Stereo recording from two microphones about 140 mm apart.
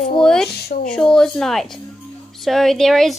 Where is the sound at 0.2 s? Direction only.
5° left (ahead or behind).